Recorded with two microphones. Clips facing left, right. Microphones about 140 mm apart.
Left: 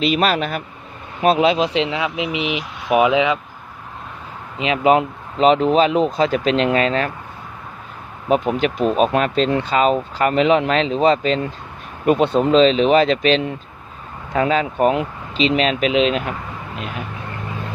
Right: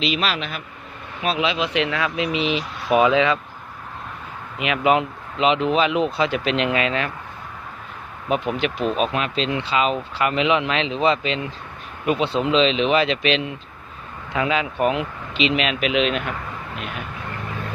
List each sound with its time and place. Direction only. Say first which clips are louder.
0.0 s speech: left 6 dB; 45° left (ahead or behind)
1.8 s speech: left 1 dB; 20° left (ahead or behind)
4.5 s speech: left 4 dB; 30° left (ahead or behind)
8.3 s speech: left 5 dB; 40° left (ahead or behind)